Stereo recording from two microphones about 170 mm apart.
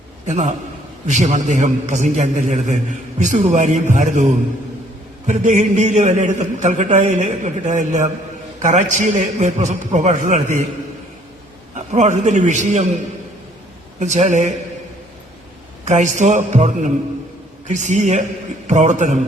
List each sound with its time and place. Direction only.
0.3 s a man's voice: 45° right (ahead or behind)
11.9 s a man's voice: 45° right (ahead or behind)
14.0 s a man's voice: 45° right (ahead or behind)
15.8 s a man's voice: 45° right (ahead or behind)